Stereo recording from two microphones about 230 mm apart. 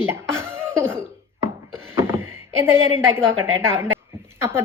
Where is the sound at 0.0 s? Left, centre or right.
Centre.